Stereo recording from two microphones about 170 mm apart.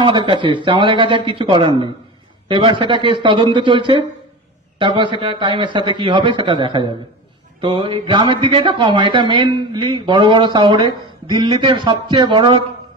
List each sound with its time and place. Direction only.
0.0 s speech: 30° right (ahead or behind)